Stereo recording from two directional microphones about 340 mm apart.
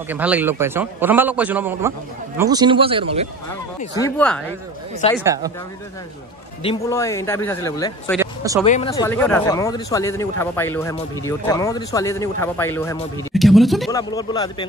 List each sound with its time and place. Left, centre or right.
0.1 s a man's voice: centre
4.0 s speech: centre
5.2 s a man's voice: centre
6.6 s speech: centre
8.6 s speech: left
8.9 s speech: centre
14.1 s speech: centre